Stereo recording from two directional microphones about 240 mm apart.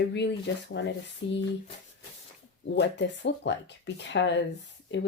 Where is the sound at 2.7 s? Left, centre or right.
Left.